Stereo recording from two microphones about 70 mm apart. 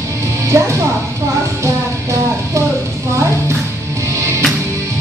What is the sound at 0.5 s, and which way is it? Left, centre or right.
Music, right.